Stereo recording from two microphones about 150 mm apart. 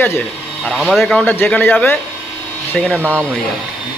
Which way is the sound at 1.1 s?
15° left (ahead or behind).